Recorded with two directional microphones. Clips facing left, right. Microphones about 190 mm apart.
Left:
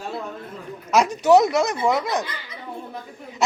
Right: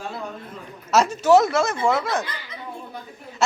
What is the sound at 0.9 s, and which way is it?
Speech, 15° left (ahead or behind).